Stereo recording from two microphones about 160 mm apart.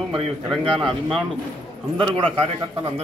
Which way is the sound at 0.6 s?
35° right (ahead or behind).